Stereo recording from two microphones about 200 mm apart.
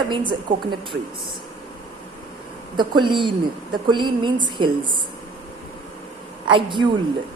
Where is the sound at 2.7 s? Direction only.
25° right (ahead or behind).